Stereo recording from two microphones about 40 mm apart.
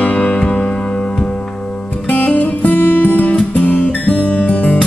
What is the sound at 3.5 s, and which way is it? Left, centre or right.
Music, left.